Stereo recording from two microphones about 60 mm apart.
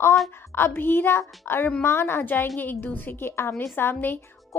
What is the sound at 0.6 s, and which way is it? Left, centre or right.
A woman's voice, left.